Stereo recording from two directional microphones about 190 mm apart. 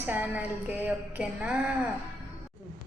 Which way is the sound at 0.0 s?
10° right (ahead or behind).